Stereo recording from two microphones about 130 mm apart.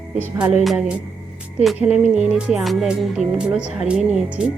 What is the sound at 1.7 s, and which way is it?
Speech, 60° left (ahead or behind).